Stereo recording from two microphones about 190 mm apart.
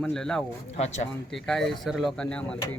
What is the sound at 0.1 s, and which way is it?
Speech, 5° left (ahead or behind).